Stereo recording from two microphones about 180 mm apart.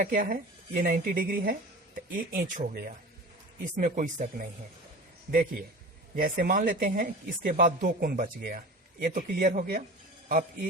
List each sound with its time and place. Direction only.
0.0 s a man's voice: 50° right (ahead or behind)